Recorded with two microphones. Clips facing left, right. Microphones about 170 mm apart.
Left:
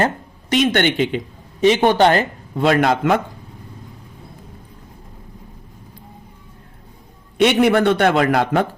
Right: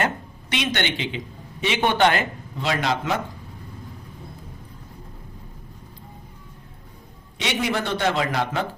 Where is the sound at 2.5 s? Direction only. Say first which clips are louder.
Left 9 dB; 55° left (ahead or behind).